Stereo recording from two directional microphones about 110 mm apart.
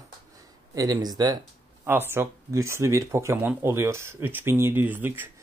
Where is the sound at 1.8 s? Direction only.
20° right (ahead or behind).